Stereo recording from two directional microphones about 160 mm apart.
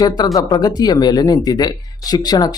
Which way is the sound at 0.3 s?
25° left (ahead or behind).